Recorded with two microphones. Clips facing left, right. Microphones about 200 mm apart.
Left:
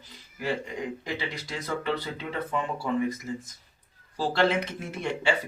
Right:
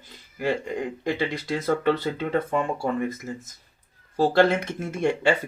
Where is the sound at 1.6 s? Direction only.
45° right (ahead or behind).